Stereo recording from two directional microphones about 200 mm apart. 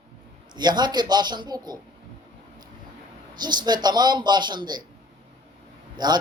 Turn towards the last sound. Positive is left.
turn(degrees=-20)  # may be behind; listen again after turning